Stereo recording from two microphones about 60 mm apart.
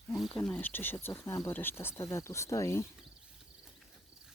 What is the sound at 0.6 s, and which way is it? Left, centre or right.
Speech, left.